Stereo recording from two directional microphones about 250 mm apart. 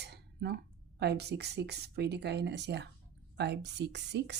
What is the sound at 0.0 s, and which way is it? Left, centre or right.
Speech, right.